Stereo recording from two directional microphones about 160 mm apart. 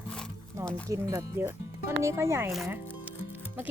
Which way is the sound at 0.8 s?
20° right (ahead or behind).